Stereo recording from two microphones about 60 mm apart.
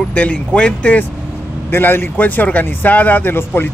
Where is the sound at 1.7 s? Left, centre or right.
Left.